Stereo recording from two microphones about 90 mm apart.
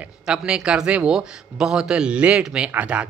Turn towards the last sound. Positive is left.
turn(degrees=-15)  # may be behind; listen again after turning